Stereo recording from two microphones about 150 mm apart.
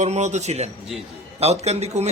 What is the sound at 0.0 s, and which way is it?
A man's voice, 50° right (ahead or behind).